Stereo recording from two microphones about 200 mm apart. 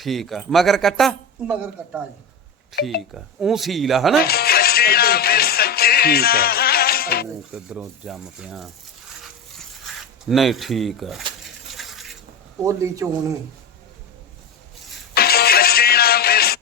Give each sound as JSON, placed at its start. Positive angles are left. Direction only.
{"t": 0.0, "sound": "speech", "side_deg": 0}
{"t": 3.0, "sound": "speech", "side_deg": 0}
{"t": 4.2, "sound": "music", "side_deg": 50}
{"t": 7.5, "sound": "speech", "side_deg": -5}
{"t": 9.2, "sound": "a sound", "side_deg": 0}
{"t": 12.6, "sound": "speech", "side_deg": -15}
{"t": 15.1, "sound": "music", "side_deg": 50}